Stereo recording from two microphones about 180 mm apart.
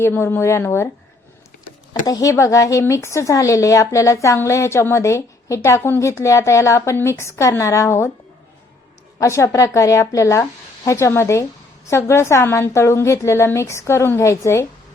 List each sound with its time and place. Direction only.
0.0 s speech: 15° left (ahead or behind)
2.0 s speech: 20° left (ahead or behind)
9.1 s speech: 15° left (ahead or behind)